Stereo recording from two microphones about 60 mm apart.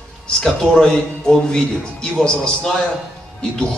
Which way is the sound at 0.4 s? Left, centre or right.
Centre.